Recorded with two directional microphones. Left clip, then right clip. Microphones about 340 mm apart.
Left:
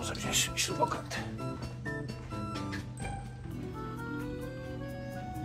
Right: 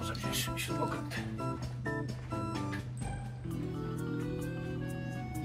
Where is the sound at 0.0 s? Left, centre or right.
Centre.